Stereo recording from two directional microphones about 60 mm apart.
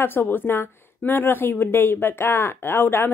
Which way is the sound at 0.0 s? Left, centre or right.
Left.